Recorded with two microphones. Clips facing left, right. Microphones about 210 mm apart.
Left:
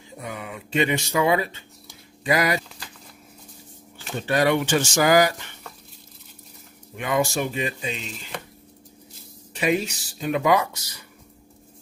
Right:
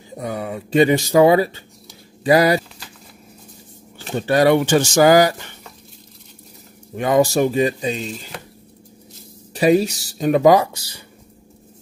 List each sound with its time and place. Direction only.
0.1 s speech: 35° right (ahead or behind)
4.0 s speech: 35° right (ahead or behind)
7.0 s speech: 40° right (ahead or behind)
9.5 s speech: 35° right (ahead or behind)